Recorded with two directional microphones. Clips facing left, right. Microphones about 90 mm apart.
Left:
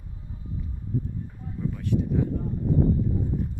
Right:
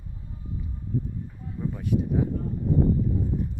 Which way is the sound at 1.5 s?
10° right (ahead or behind).